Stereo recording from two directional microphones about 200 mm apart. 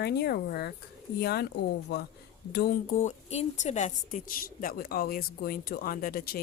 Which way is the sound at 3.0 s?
30° left (ahead or behind).